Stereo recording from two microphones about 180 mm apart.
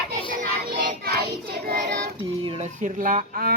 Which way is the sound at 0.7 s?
65° right (ahead or behind).